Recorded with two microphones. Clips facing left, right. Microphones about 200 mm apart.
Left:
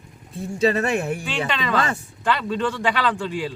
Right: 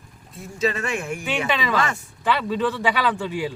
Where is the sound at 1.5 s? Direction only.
5° right (ahead or behind).